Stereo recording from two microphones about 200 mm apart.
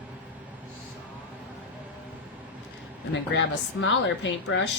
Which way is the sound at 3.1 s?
65° left (ahead or behind).